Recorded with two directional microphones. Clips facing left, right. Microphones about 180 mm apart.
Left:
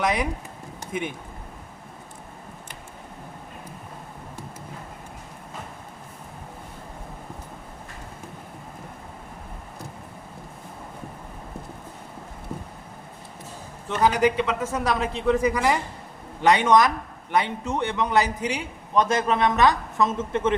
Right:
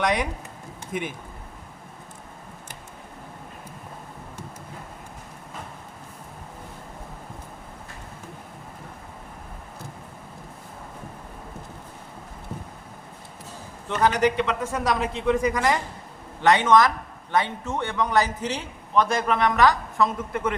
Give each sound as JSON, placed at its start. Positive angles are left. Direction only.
{"t": 0.0, "sound": "a man's voice", "side_deg": 5}
{"t": 13.8, "sound": "a man's voice", "side_deg": 5}